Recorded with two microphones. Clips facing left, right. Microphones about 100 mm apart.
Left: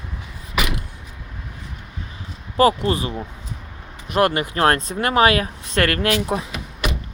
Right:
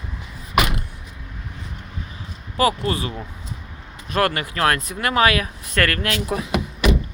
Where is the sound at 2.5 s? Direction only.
30° left (ahead or behind).